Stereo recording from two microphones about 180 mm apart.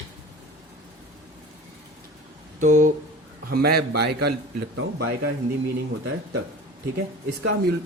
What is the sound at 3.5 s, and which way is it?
Speech, 60° right (ahead or behind).